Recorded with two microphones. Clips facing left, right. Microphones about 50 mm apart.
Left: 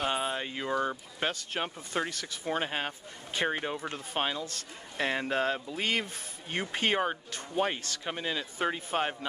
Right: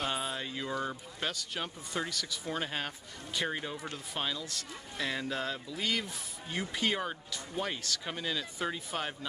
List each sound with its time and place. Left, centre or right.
0.0 s a sound: centre
0.7 s speech: left
1.3 s speech: left